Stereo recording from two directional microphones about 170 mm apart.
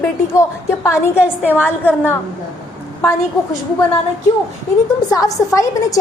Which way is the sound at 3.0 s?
15° left (ahead or behind).